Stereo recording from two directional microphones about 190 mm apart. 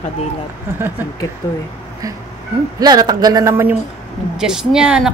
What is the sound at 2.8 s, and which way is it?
Speech, 20° right (ahead or behind).